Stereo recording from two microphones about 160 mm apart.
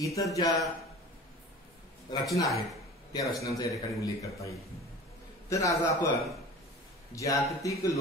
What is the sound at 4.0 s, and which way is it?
A man's voice, 20° left (ahead or behind).